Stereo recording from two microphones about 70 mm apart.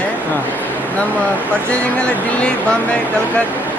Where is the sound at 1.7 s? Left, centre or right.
Centre.